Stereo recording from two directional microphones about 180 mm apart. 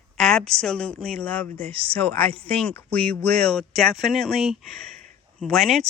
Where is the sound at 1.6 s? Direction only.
30° right (ahead or behind).